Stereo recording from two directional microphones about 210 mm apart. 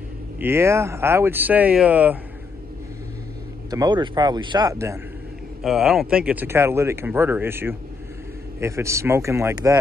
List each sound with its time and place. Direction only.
0.4 s speech: 10° right (ahead or behind)
3.7 s speech: 20° right (ahead or behind)
5.6 s speech: centre (ahead or behind)